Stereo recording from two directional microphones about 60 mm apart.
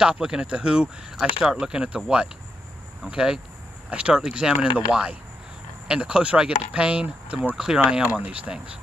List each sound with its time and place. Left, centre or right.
0.0 s speech: centre
7.9 s speech: right